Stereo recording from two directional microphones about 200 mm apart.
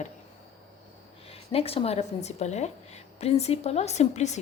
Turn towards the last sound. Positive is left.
turn(degrees=35)  # may be behind; listen again after turning